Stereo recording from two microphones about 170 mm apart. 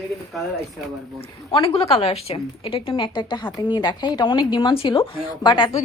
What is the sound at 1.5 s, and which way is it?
A woman's voice, 35° left (ahead or behind).